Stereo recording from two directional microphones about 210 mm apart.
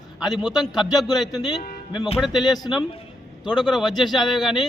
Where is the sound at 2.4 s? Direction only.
20° left (ahead or behind).